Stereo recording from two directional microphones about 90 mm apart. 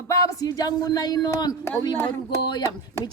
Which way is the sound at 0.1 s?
45° left (ahead or behind).